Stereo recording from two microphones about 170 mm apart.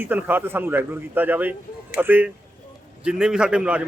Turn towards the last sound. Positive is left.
turn(degrees=-5)  # may be behind; listen again after turning